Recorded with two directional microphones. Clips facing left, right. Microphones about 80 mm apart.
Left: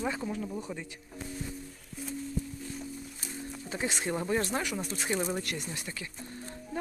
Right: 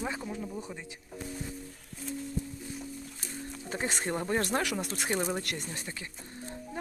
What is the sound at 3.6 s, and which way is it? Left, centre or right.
Speech, right.